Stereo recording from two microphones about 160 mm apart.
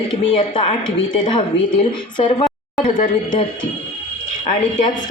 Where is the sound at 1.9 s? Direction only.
30° left (ahead or behind).